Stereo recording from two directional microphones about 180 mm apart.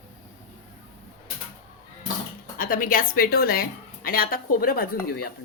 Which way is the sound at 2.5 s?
50° left (ahead or behind).